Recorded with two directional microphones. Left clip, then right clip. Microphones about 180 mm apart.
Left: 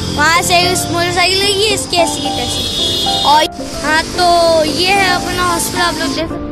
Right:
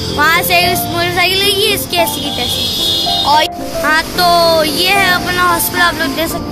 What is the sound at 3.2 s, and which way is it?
Speech, 30° left (ahead or behind).